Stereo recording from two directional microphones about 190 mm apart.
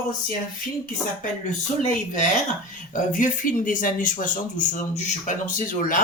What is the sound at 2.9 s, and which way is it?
Speech, 45° left (ahead or behind).